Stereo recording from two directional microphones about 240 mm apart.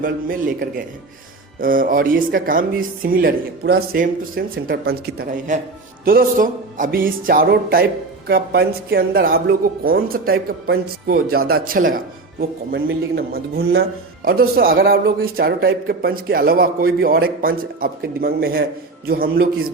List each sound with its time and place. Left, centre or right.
0.0 s speech: right